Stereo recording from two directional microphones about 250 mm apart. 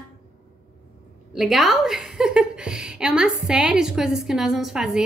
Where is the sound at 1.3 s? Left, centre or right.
Centre.